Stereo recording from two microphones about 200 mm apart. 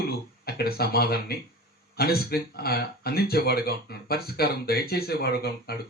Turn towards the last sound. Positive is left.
turn(degrees=50)  # may be behind; listen again after turning